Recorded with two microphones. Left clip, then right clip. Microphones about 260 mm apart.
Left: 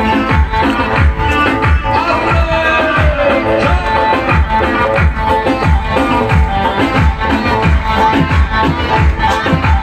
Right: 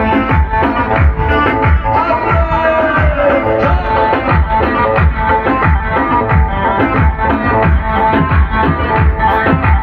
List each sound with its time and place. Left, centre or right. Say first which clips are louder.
0.1 s music: even; left
6.8 s music: even; left